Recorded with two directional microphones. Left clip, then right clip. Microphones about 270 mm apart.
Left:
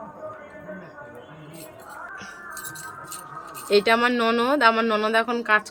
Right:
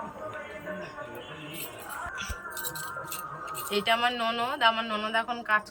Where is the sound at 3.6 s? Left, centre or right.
Centre.